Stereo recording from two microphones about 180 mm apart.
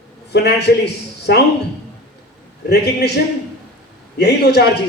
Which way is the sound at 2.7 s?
65° left (ahead or behind).